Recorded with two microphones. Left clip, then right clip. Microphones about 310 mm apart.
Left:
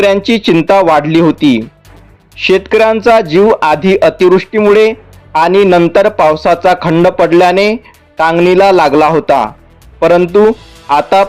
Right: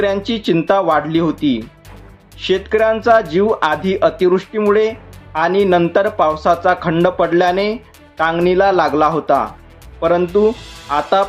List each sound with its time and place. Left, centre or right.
0.0 s speech: left